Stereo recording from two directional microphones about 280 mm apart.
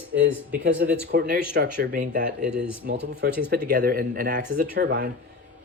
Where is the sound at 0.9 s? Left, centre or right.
Right.